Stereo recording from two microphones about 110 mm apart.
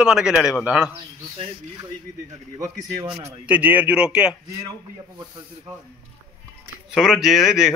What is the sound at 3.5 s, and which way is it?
Speech, 15° right (ahead or behind).